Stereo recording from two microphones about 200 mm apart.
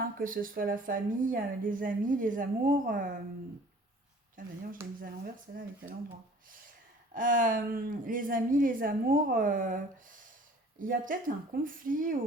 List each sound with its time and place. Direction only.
0.2 s a woman's voice: 45° right (ahead or behind)
4.4 s a woman's voice: 45° right (ahead or behind)
7.1 s a woman's voice: 40° right (ahead or behind)